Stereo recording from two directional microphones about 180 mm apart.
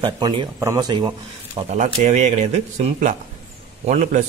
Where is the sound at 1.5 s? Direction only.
40° right (ahead or behind).